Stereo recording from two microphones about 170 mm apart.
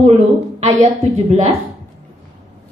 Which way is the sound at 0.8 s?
40° right (ahead or behind).